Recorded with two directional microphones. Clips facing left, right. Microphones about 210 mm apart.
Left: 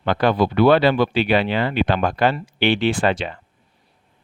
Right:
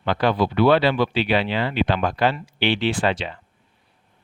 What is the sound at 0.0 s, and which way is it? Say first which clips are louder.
Speech: left 2 dB; 50° left (ahead or behind).